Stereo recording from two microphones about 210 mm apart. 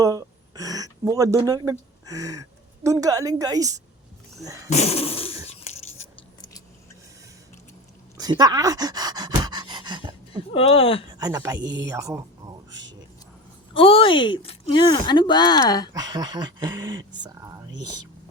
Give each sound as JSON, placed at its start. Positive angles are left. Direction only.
{"t": 0.0, "sound": "speech", "side_deg": -15}
{"t": 4.7, "sound": "speech", "side_deg": 30}
{"t": 5.5, "sound": "a sound", "side_deg": 30}
{"t": 8.2, "sound": "pant", "side_deg": -20}
{"t": 10.5, "sound": "speech", "side_deg": 25}
{"t": 11.2, "sound": "speech", "side_deg": -15}
{"t": 11.5, "sound": "speech", "side_deg": -60}
{"t": 11.9, "sound": "speech", "side_deg": -15}
{"t": 13.7, "sound": "speech", "side_deg": 25}
{"t": 16.0, "sound": "speech", "side_deg": -20}